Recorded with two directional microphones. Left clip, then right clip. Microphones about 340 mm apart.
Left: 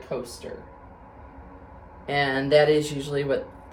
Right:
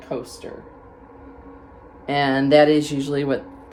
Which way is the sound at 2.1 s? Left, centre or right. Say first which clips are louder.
Right 4 dB; right.